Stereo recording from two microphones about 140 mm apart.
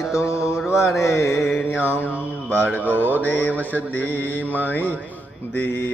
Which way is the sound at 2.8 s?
10° right (ahead or behind).